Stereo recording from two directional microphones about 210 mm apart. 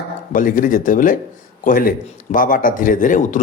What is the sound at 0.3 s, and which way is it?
A man's voice, 40° left (ahead or behind).